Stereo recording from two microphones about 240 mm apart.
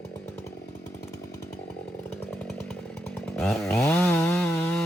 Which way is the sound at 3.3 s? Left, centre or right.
Centre.